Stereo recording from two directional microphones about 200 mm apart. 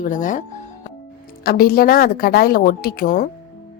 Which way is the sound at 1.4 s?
50° left (ahead or behind).